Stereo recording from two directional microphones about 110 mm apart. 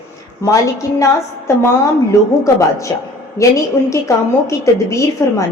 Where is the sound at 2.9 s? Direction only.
30° left (ahead or behind).